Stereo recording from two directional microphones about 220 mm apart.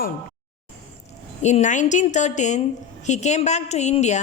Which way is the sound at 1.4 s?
30° left (ahead or behind).